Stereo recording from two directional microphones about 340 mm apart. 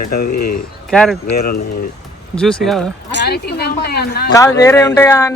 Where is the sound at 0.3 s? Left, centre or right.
Left.